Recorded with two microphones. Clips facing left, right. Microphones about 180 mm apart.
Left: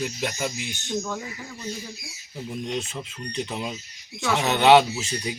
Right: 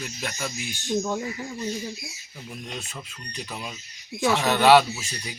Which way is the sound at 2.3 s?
25° left (ahead or behind).